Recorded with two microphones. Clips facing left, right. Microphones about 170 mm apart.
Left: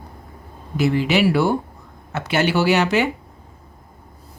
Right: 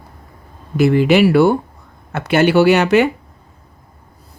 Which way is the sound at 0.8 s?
55° right (ahead or behind).